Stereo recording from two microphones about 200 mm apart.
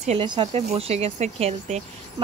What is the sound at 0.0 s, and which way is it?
Speech, 30° right (ahead or behind).